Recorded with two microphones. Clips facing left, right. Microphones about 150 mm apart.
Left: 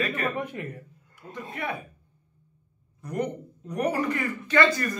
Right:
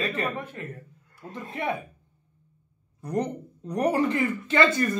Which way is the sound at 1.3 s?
25° right (ahead or behind).